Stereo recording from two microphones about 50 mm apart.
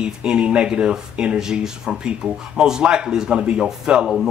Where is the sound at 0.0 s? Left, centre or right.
Centre.